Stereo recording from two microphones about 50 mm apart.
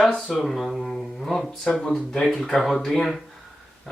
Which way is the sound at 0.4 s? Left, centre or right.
Centre.